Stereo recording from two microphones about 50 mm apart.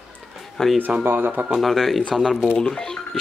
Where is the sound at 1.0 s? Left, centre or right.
Right.